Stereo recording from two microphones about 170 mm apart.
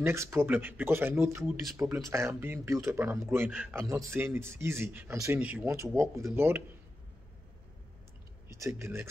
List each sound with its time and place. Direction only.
0.0 s speech: 15° right (ahead or behind)
3.8 s speech: 20° right (ahead or behind)
8.5 s speech: 15° right (ahead or behind)